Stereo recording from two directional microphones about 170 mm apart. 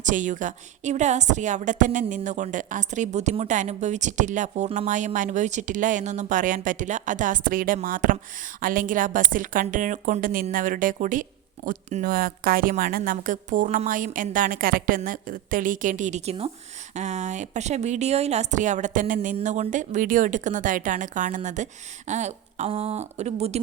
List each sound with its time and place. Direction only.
0.0 s a woman's voice: 50° right (ahead or behind)
12.1 s a woman's voice: 60° right (ahead or behind); by 23.6 s 40° right (ahead or behind)